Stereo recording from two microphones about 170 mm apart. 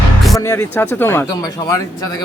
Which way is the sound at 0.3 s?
15° left (ahead or behind).